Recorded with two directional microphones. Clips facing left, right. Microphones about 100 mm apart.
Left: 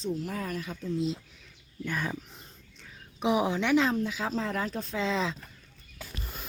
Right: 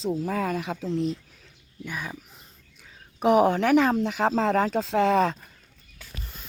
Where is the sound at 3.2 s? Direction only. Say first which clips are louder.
Right 7 dB; 50° right (ahead or behind).